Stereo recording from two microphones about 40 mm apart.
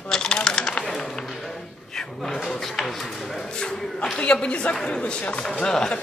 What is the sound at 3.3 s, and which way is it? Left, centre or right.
Speech, centre.